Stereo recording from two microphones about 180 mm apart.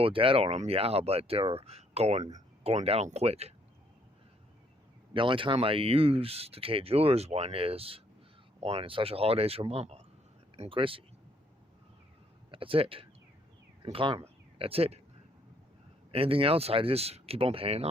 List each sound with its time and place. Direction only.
0.0 s speech: 30° right (ahead or behind)
5.1 s speech: 30° right (ahead or behind)
12.5 s speech: 30° right (ahead or behind)
16.1 s speech: 30° right (ahead or behind)